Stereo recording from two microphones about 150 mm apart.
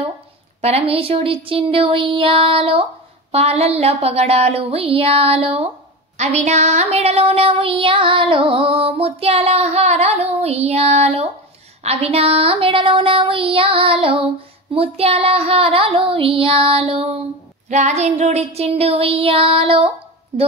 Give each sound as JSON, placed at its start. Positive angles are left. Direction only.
{"t": 0.6, "sound": "speech", "side_deg": -45}
{"t": 6.1, "sound": "child singing", "side_deg": -50}
{"t": 11.8, "sound": "speech", "side_deg": -40}
{"t": 17.6, "sound": "speech", "side_deg": -50}